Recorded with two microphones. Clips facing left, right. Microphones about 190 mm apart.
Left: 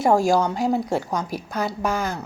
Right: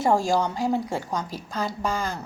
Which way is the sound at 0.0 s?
10° left (ahead or behind).